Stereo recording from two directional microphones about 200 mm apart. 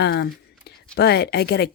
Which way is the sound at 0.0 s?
55° left (ahead or behind).